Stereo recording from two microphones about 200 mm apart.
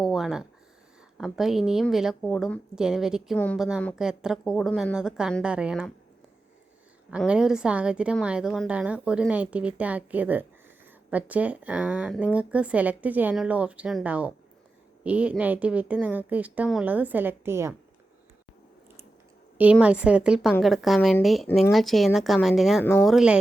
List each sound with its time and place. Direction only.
0.0 s a sound: centre (ahead or behind)
1.2 s a woman's voice: centre (ahead or behind)
7.1 s a woman's voice: 5° right (ahead or behind)
19.7 s a woman's voice: 5° right (ahead or behind)